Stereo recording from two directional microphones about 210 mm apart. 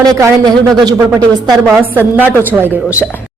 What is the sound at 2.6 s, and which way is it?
Speech, 5° right (ahead or behind).